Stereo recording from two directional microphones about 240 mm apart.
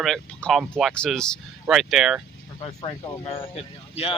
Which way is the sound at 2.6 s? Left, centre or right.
Left.